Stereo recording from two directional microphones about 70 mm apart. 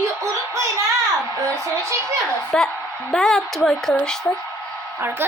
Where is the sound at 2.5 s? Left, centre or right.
Centre.